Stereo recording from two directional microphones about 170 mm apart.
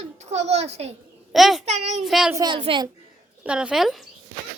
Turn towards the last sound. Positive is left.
turn(degrees=0)  # may be behind; listen again after turning